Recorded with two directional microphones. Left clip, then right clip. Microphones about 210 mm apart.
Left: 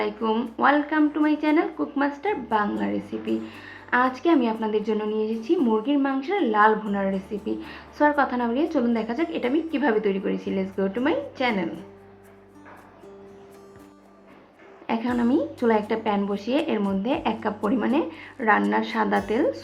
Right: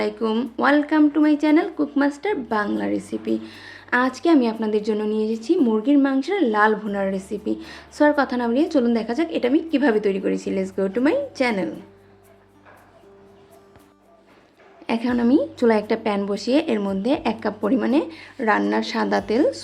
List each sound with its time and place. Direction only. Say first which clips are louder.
0.0 s speech: right 2 dB; 50° right (ahead or behind)
14.8 s speech: right 3 dB; 50° right (ahead or behind)